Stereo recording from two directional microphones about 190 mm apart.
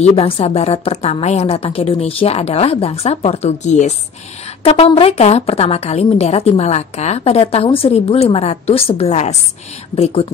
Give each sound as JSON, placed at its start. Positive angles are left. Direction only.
{"t": 0.1, "sound": "a woman's voice", "side_deg": 30}